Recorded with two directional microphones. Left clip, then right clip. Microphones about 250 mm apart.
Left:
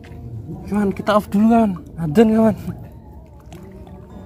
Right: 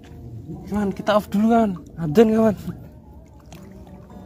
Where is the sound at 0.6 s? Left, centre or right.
Centre.